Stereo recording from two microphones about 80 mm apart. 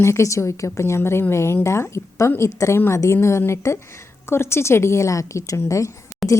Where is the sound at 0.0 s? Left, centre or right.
Left.